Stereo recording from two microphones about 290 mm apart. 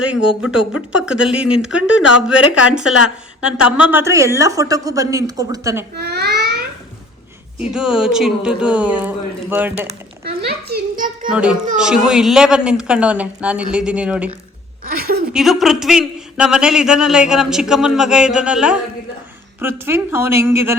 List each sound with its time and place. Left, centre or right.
0.0 s a man's voice: centre
6.0 s baby cry: right
7.6 s a man's voice: centre
9.8 s a sound: right
11.3 s a man's voice: centre
14.8 s a sound: right
15.3 s a man's voice: centre